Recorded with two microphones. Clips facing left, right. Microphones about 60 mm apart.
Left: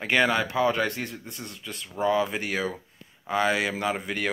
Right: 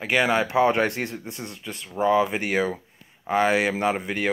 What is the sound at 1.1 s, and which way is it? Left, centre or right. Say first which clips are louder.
Speech: right 4 dB; centre.